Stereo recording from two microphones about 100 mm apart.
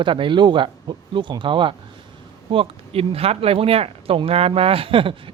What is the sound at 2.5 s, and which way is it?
Speech, 70° right (ahead or behind).